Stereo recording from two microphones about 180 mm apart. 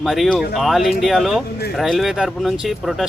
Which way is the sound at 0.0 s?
Centre (ahead or behind).